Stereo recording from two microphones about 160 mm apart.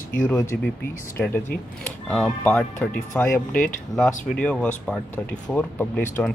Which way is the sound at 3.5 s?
55° left (ahead or behind).